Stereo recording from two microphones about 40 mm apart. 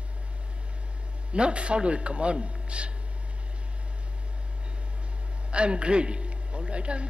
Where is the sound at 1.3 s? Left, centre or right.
Right.